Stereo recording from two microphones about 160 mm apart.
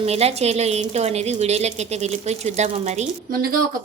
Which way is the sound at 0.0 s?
40° right (ahead or behind).